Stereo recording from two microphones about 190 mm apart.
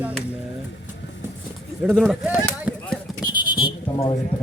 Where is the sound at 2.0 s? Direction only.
Centre (ahead or behind).